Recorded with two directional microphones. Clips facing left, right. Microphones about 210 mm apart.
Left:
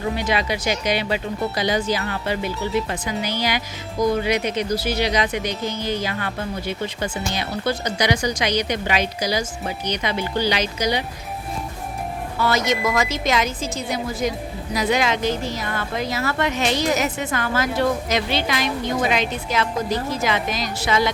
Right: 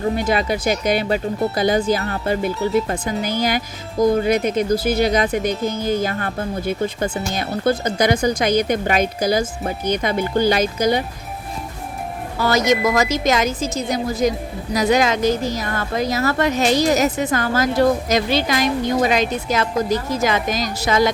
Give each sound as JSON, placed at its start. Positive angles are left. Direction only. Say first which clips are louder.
{"t": 0.3, "sound": "speech", "louder": "right 3 dB", "side_deg": -50}
{"t": 12.4, "sound": "speech", "louder": "right 4 dB", "side_deg": -40}